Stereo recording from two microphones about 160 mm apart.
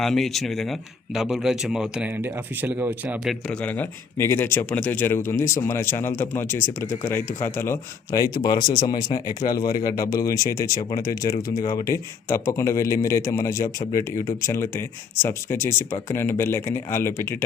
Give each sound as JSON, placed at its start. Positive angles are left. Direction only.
{"t": 0.0, "sound": "speech", "side_deg": 0}
{"t": 3.4, "sound": "a man's voice", "side_deg": 5}